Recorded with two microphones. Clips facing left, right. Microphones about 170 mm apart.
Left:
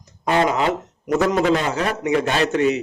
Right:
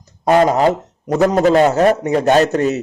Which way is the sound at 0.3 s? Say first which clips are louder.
Right 6 dB; 40° right (ahead or behind).